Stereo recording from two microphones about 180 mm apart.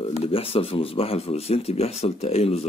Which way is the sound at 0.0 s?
35° left (ahead or behind).